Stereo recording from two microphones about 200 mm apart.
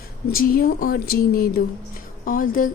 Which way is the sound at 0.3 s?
45° left (ahead or behind).